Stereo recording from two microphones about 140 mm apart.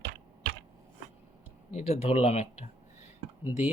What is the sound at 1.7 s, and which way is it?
Speech, 50° left (ahead or behind).